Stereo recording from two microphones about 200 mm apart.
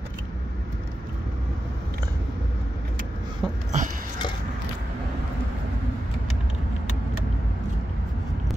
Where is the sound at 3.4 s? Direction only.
Centre (ahead or behind).